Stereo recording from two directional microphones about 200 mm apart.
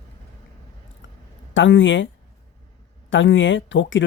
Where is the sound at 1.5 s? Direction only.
70° left (ahead or behind).